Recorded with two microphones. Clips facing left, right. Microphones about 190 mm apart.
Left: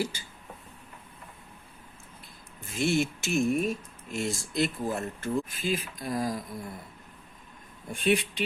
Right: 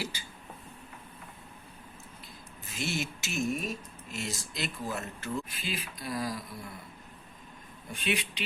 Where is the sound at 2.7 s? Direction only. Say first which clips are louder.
Left 8 dB; 55° left (ahead or behind).